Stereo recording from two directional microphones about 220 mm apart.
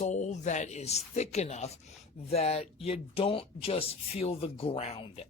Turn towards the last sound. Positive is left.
turn(degrees=25)  # may be behind; listen again after turning